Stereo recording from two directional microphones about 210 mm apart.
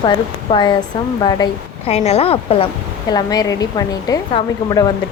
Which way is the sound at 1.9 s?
30° left (ahead or behind).